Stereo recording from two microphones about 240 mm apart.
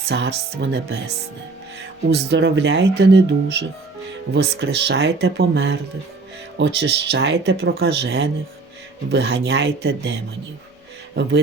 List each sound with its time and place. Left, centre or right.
0.1 s speech: right